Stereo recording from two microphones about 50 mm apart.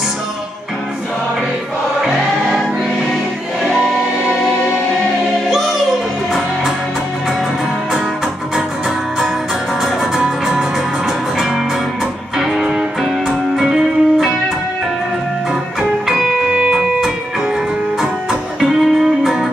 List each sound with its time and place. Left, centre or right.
10.1 s music: centre
13.6 s music: centre
16.4 s music: right
18.6 s music: centre